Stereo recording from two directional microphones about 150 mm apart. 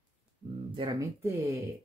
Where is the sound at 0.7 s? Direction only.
30° right (ahead or behind).